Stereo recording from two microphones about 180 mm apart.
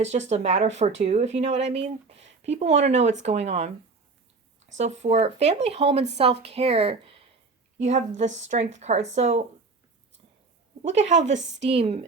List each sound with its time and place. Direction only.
0.0 s speech: 40° right (ahead or behind)
4.8 s speech: 40° right (ahead or behind)
10.8 s speech: 40° right (ahead or behind)
11.2 s a woman's voice: 90° right
11.7 s speech: 35° right (ahead or behind)